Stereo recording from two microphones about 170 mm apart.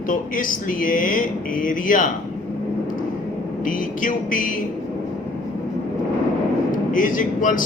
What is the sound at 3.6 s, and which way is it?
Speech, 50° left (ahead or behind).